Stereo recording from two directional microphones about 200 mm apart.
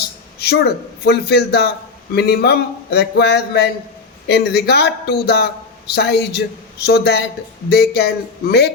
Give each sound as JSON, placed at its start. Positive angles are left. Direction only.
{"t": 0.3, "sound": "speech", "side_deg": 55}